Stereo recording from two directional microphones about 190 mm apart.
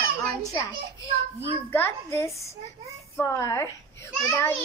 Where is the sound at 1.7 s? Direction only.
10° left (ahead or behind).